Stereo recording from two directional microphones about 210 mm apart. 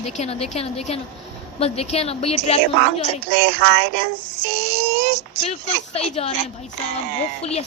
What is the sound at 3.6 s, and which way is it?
Child singing, 55° right (ahead or behind).